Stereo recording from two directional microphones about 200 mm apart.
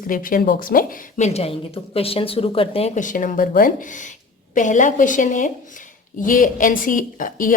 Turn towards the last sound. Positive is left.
turn(degrees=40)  # may be behind; listen again after turning